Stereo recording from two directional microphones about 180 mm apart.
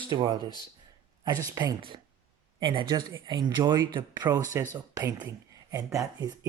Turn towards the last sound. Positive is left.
turn(degrees=-20)  # may be behind; listen again after turning